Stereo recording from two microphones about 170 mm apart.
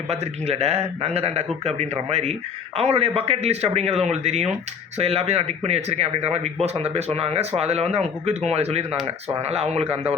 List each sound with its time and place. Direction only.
0.1 s speech: 40° right (ahead or behind)